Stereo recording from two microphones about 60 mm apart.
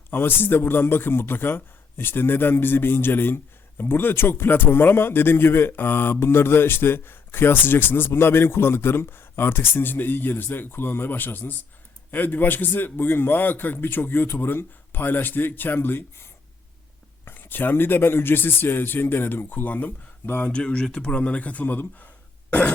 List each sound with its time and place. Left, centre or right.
0.1 s a man's voice: left
17.2 s a man's voice: left
20.5 s speech: centre